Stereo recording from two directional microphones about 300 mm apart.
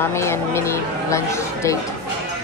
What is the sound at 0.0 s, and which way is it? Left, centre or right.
Speech, centre.